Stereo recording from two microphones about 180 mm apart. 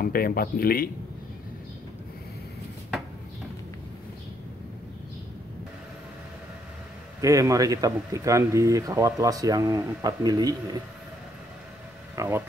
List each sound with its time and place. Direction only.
0.0 s speech: 55° left (ahead or behind)
7.2 s speech: 20° right (ahead or behind)
12.2 s speech: 15° right (ahead or behind)